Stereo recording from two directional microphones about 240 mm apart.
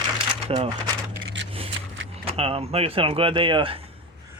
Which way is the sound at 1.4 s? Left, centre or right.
Right.